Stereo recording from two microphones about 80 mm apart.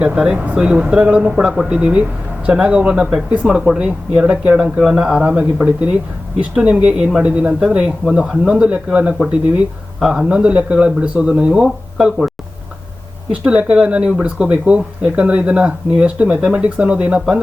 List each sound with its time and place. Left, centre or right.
0.0 s speech: centre
13.3 s speech: centre